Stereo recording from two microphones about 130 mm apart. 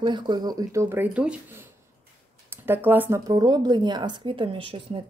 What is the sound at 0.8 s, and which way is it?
Speech, 15° right (ahead or behind).